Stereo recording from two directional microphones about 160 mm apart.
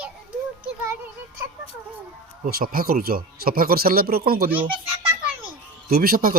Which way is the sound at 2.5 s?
70° right (ahead or behind).